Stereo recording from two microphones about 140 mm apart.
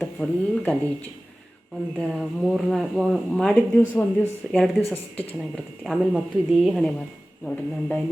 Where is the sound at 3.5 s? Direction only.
15° left (ahead or behind).